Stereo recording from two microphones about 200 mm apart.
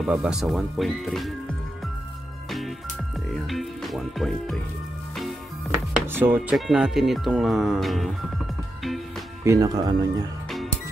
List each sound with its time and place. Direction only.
0.0 s speech: 5° right (ahead or behind)
3.3 s music: centre (ahead or behind)
6.1 s speech: 10° right (ahead or behind)
9.4 s speech: 15° right (ahead or behind)